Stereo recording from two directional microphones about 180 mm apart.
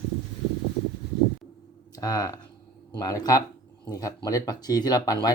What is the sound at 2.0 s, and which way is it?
Speech, 20° left (ahead or behind).